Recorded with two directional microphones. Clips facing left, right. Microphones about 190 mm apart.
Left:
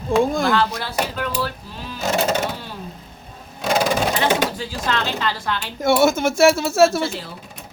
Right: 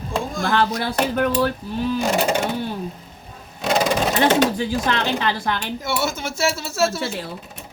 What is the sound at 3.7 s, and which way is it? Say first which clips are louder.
Wild animals: even; centre (ahead or behind).